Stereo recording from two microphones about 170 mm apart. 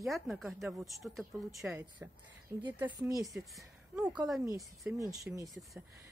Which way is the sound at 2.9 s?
20° right (ahead or behind).